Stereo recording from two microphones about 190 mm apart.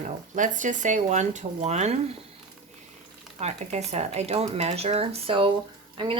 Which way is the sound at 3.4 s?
35° right (ahead or behind).